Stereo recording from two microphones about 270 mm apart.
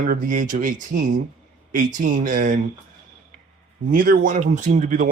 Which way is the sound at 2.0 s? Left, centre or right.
Right.